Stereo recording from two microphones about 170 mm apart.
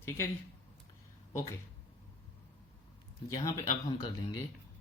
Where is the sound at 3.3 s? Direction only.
20° left (ahead or behind).